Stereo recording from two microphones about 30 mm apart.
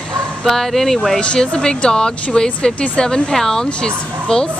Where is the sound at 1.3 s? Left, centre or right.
Left.